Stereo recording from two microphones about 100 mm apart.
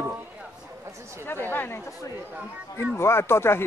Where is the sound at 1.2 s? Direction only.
20° left (ahead or behind).